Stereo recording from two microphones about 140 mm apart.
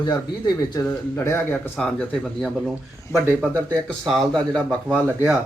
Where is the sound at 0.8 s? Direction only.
15° left (ahead or behind).